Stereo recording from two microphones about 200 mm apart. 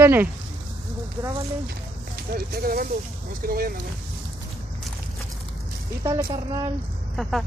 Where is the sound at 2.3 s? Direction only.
50° right (ahead or behind).